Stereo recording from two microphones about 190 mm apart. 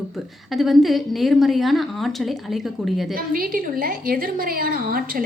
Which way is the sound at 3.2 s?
50° right (ahead or behind).